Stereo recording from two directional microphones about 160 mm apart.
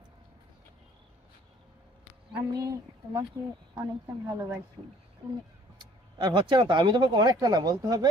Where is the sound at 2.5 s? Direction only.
20° right (ahead or behind).